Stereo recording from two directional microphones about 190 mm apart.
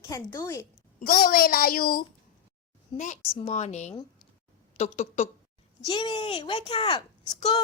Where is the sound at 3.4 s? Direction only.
35° left (ahead or behind).